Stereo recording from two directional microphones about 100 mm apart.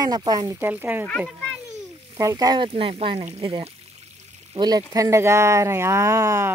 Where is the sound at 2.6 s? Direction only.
70° right (ahead or behind).